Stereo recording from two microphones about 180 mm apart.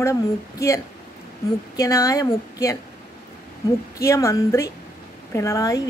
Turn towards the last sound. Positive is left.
turn(degrees=20)  # may be behind; listen again after turning